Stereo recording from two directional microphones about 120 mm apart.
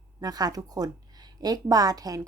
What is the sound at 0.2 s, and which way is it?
A woman's voice, 35° right (ahead or behind).